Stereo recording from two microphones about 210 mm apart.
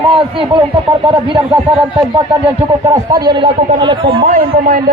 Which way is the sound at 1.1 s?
25° right (ahead or behind).